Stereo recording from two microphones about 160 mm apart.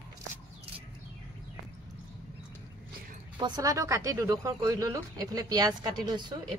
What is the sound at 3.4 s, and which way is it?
Speech, 25° right (ahead or behind).